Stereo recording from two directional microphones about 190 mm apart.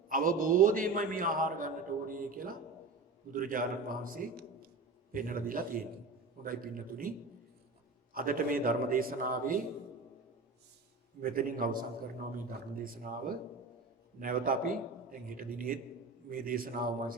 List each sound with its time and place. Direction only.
0.1 s a man's voice: 45° right (ahead or behind)
8.1 s a man's voice: 50° right (ahead or behind)
11.2 s a man's voice: 45° right (ahead or behind)